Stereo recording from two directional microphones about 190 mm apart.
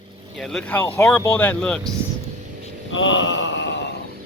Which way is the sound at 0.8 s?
15° left (ahead or behind).